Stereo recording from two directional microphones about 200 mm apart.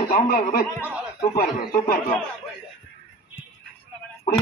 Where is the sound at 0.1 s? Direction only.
45° left (ahead or behind).